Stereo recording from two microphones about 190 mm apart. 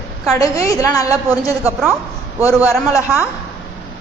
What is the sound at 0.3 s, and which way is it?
Speech, 15° left (ahead or behind).